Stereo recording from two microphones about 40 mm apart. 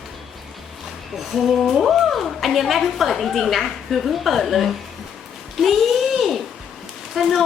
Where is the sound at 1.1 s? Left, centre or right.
Centre.